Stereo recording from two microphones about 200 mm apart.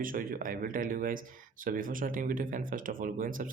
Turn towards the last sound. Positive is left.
turn(degrees=-40)  # may be behind; listen again after turning